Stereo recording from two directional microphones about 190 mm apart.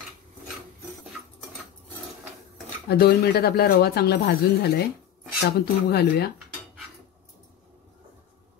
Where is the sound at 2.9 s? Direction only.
55° left (ahead or behind).